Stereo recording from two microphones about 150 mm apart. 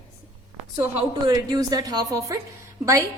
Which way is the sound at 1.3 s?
25° right (ahead or behind).